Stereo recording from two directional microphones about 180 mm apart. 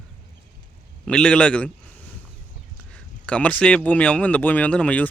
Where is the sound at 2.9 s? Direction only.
5° left (ahead or behind).